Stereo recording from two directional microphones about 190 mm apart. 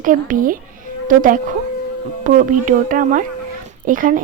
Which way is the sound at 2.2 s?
45° right (ahead or behind).